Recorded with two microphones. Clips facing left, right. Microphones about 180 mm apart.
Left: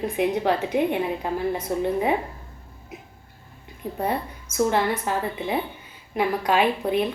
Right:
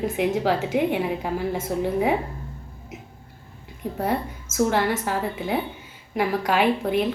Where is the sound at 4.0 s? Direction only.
Centre (ahead or behind).